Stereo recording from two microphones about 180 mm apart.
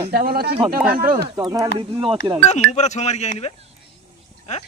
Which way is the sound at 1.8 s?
30° right (ahead or behind).